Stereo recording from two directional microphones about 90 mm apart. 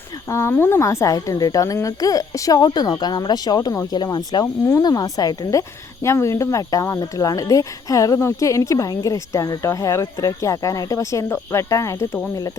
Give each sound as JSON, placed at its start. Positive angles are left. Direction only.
{"t": 0.3, "sound": "speech", "side_deg": 30}